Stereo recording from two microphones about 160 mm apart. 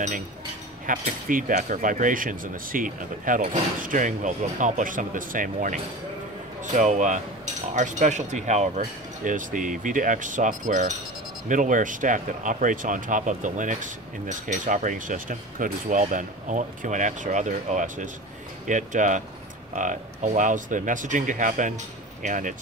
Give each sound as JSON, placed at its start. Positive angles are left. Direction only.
{"t": 0.8, "sound": "speech", "side_deg": -55}